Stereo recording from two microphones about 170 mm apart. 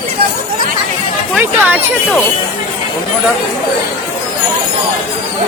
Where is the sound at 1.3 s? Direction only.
10° right (ahead or behind).